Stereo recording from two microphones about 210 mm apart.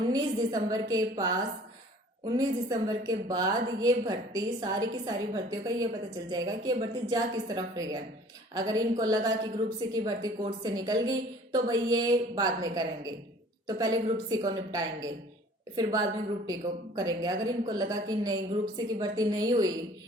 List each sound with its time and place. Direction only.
0.1 s a woman's voice: 15° right (ahead or behind)